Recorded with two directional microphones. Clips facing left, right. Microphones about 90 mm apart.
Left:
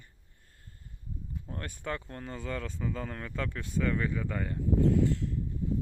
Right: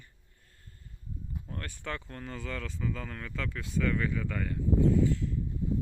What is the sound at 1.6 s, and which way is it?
Speech, 20° left (ahead or behind).